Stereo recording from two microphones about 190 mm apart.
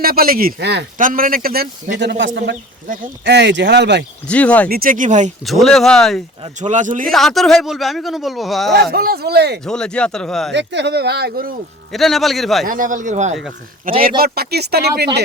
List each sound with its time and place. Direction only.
0.0 s a man's voice: 50° right (ahead or behind)
0.9 s a man's voice: 45° right (ahead or behind); by 4.0 s 65° right (ahead or behind)
4.3 s speech: 5° left (ahead or behind)
4.7 s a man's voice: 50° right (ahead or behind)
5.5 s speech: centre (ahead or behind)
6.6 s a man's voice: 40° right (ahead or behind)
7.1 s speech: centre (ahead or behind)
8.7 s speech: 55° right (ahead or behind)
9.6 s speech: 5° left (ahead or behind)
10.5 s speech: 65° right (ahead or behind)
11.9 s speech: centre (ahead or behind)
12.6 s a man's voice: 45° right (ahead or behind)
14.2 s speech: 55° right (ahead or behind)